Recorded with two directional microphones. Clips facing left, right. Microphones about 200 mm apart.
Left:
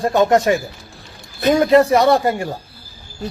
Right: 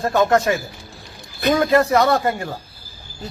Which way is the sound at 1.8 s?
30° left (ahead or behind).